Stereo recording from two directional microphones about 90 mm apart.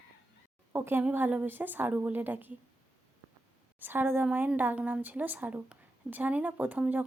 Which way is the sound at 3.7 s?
20° right (ahead or behind).